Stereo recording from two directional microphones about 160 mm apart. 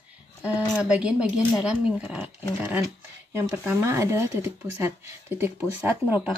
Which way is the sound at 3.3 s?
15° right (ahead or behind).